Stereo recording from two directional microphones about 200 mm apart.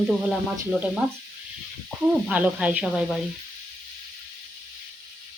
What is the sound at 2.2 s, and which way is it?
Speech, 5° right (ahead or behind).